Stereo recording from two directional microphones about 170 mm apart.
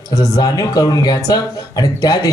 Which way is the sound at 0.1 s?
20° left (ahead or behind).